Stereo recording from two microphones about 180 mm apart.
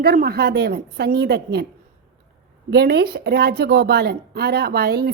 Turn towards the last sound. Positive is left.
turn(degrees=-60)  # may be behind; listen again after turning